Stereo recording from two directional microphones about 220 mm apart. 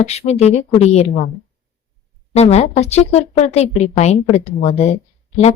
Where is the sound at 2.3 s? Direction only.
30° left (ahead or behind).